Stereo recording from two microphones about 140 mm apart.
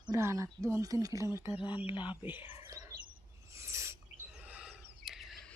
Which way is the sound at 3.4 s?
20° right (ahead or behind).